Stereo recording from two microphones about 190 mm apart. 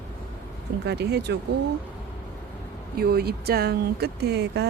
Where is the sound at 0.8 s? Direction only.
60° right (ahead or behind).